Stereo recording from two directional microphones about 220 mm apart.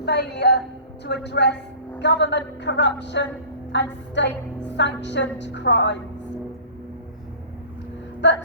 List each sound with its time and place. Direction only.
0.0 s a woman's voice: 50° left (ahead or behind)
8.2 s a woman's voice: 55° left (ahead or behind)